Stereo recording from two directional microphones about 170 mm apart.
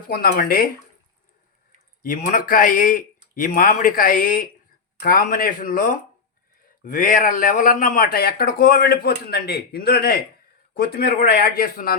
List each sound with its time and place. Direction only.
0.1 s speech: 60° left (ahead or behind)
2.0 s a man's voice: 55° left (ahead or behind)